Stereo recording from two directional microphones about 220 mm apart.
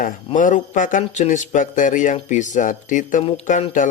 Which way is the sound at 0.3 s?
35° left (ahead or behind).